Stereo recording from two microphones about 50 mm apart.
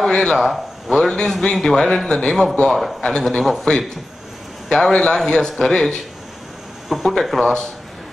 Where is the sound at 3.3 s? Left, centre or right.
Centre.